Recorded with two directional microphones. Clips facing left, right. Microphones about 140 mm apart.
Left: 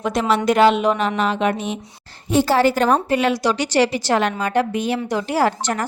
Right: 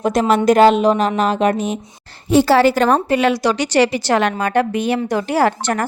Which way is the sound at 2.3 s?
90° right.